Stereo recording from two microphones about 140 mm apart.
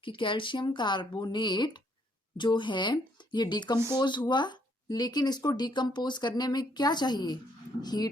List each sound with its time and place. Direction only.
0.0 s speech: 35° left (ahead or behind)